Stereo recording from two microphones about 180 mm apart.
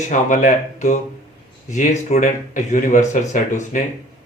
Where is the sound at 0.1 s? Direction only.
45° left (ahead or behind).